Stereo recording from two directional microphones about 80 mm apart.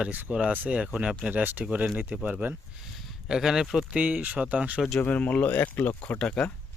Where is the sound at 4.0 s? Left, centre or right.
Centre.